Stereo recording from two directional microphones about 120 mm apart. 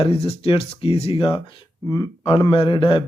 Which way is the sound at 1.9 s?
30° left (ahead or behind).